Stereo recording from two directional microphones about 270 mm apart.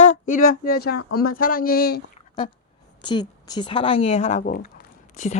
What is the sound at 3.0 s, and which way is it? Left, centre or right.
A woman's voice, centre.